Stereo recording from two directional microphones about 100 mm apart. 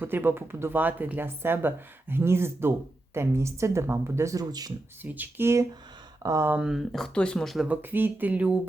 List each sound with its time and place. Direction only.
0.0 s speech: 20° right (ahead or behind); by 4.7 s 40° right (ahead or behind)
5.0 s speech: 15° right (ahead or behind)
6.6 s speech: 5° right (ahead or behind)
7.7 s speech: 20° right (ahead or behind)